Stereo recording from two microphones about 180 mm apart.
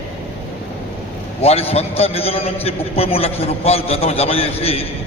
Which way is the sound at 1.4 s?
35° left (ahead or behind).